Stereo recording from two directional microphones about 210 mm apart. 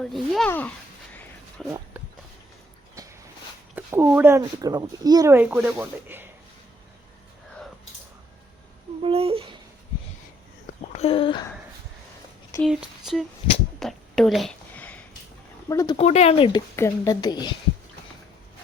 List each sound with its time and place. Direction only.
0.0 s speech: centre (ahead or behind)
3.8 s speech: 10° right (ahead or behind)
9.0 s speech: 25° right (ahead or behind)
10.9 s speech: 25° left (ahead or behind)
12.6 s speech: centre (ahead or behind)
13.7 s a sound: centre (ahead or behind)
15.7 s speech: 15° left (ahead or behind)
16.0 s speech: 30° left (ahead or behind)